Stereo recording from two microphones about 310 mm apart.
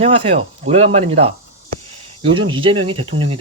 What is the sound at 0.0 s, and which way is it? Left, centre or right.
Speech, centre.